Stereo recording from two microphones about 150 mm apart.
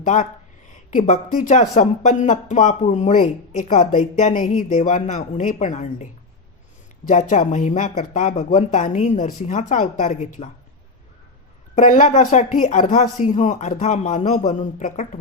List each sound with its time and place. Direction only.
0.0 s speech: 55° left (ahead or behind)
7.1 s speech: 55° left (ahead or behind)
11.7 s speech: 55° left (ahead or behind)